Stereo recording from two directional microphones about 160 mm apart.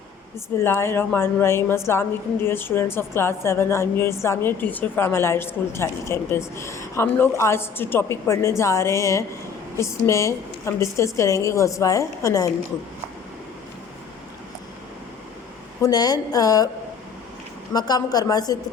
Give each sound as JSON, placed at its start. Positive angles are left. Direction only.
{"t": 0.6, "sound": "a woman's voice", "side_deg": 15}
{"t": 15.8, "sound": "a woman's voice", "side_deg": 25}
{"t": 17.7, "sound": "a woman's voice", "side_deg": 25}